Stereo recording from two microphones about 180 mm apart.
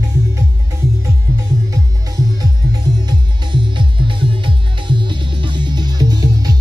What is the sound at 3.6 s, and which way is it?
Music, 25° right (ahead or behind).